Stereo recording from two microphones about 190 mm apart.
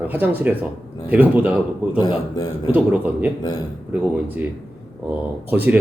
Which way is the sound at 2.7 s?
10° right (ahead or behind).